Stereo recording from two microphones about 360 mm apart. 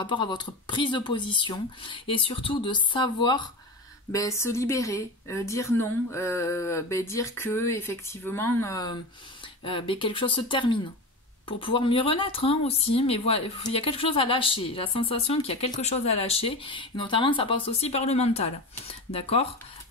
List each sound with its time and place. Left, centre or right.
0.0 s speech: centre